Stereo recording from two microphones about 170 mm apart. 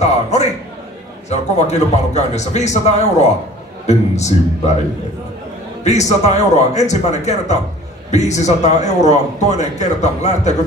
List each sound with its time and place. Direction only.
0.0 s a sound: 40° left (ahead or behind)
1.3 s a man's voice: 40° left (ahead or behind)
5.9 s a man's voice: 40° left (ahead or behind)